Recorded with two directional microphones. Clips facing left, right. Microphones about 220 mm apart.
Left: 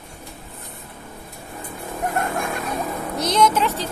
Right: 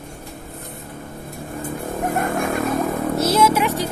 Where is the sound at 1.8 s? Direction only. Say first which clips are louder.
Right 2 dB; 50° right (ahead or behind).